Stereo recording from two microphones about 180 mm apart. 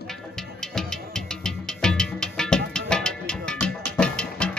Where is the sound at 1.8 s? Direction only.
5° left (ahead or behind).